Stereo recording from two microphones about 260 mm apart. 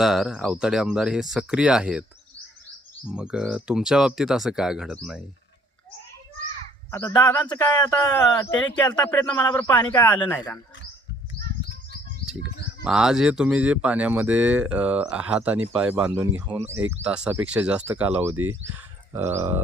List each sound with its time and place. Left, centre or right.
0.0 s speech: centre
3.1 s speech: centre
6.9 s speech: centre
7.4 s speech: centre
7.7 s speech: centre
12.8 s speech: centre